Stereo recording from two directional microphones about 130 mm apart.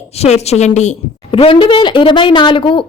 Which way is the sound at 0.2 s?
55° left (ahead or behind).